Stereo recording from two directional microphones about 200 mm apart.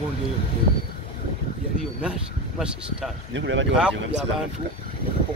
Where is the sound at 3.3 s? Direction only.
65° right (ahead or behind).